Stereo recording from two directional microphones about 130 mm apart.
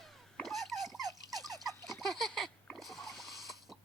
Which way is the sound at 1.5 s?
30° right (ahead or behind).